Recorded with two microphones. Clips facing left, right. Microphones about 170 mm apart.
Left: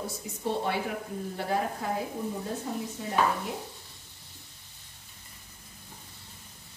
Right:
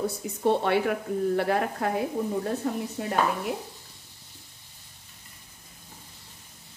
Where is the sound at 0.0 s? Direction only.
65° right (ahead or behind).